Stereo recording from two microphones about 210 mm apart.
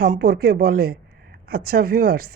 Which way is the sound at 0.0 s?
45° right (ahead or behind).